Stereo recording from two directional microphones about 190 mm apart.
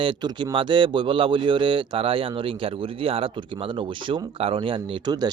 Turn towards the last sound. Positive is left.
turn(degrees=-20)  # may be behind; listen again after turning